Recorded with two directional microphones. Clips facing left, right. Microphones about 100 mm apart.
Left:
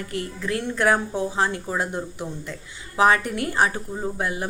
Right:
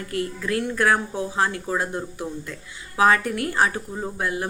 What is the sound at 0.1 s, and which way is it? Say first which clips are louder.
Speech: right 3 dB; 25° left (ahead or behind).